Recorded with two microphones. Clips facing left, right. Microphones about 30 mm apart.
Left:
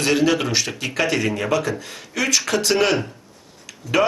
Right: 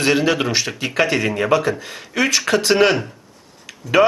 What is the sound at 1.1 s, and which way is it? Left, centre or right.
Speech, right.